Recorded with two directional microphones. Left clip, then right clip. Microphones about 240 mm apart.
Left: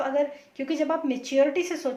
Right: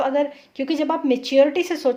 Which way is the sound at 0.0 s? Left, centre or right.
Right.